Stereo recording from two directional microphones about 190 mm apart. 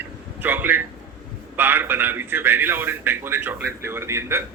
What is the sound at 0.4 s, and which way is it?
A man's voice, 10° right (ahead or behind).